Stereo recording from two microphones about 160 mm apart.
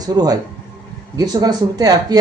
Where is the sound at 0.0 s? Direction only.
25° right (ahead or behind).